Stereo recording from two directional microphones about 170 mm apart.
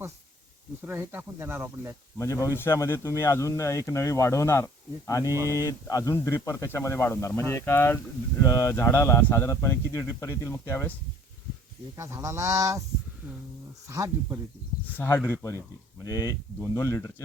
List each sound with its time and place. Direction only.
0.9 s speech: 15° right (ahead or behind)
2.1 s speech: 20° left (ahead or behind)
5.3 s speech: 15° right (ahead or behind)
5.6 s speech: 20° left (ahead or behind)
11.9 s speech: 15° right (ahead or behind)
13.8 s speech: 15° right (ahead or behind)
14.9 s speech: 10° left (ahead or behind)